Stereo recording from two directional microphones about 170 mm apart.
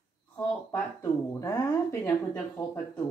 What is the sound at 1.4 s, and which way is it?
A woman's voice, 20° left (ahead or behind).